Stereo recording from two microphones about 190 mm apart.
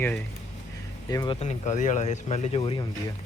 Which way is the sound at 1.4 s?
40° left (ahead or behind).